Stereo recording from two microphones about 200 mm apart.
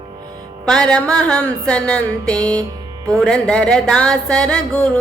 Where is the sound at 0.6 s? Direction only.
5° left (ahead or behind).